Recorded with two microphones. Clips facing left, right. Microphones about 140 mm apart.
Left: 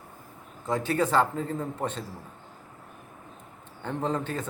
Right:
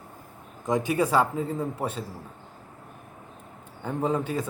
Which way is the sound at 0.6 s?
15° right (ahead or behind).